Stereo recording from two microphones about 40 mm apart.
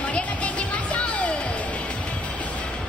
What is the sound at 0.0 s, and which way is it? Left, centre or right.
Music, left.